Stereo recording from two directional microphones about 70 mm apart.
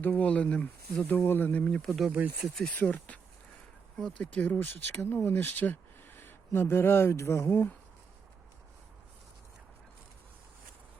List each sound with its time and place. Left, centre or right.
0.0 s speech: left
1.6 s speech: centre
2.0 s speech: right
2.7 s speech: left